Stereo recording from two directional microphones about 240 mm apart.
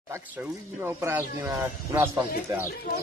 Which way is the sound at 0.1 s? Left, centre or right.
Centre.